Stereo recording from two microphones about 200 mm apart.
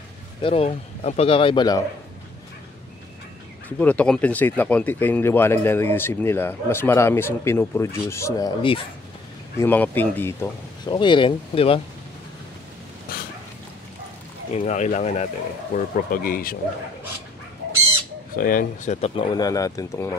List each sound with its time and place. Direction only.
0.4 s speech: 30° left (ahead or behind)
3.6 s speech: 5° left (ahead or behind); by 8.8 s 20° left (ahead or behind)
9.6 s speech: 10° left (ahead or behind)
10.9 s speech: 25° left (ahead or behind)
13.1 s dog: 45° left (ahead or behind)
14.5 s speech: 35° left (ahead or behind)
18.3 s speech: 45° left (ahead or behind)
18.9 s speech: 30° left (ahead or behind)